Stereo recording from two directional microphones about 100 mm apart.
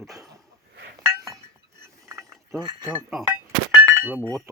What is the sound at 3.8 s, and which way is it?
Chink, 30° right (ahead or behind).